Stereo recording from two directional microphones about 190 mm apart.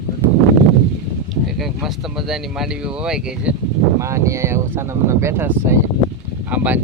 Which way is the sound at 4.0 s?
15° right (ahead or behind).